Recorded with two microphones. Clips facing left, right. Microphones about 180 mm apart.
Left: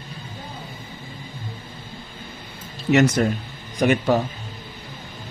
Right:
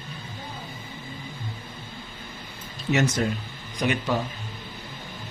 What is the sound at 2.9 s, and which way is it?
Speech, 65° left (ahead or behind).